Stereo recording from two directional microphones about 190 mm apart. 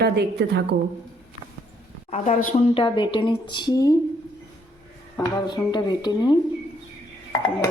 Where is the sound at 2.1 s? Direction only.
40° left (ahead or behind); by 4.0 s 20° left (ahead or behind).